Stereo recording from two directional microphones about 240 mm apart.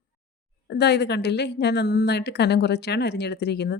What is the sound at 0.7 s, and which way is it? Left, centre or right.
A woman's voice, left.